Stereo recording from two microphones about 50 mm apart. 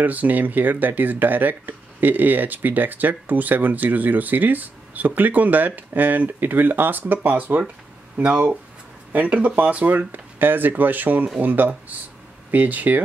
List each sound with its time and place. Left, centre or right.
0.0 s speech: right